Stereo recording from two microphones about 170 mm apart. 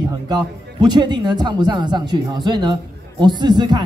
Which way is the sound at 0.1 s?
25° right (ahead or behind).